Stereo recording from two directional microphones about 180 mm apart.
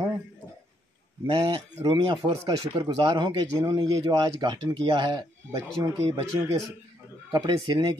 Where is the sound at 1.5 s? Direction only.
30° right (ahead or behind).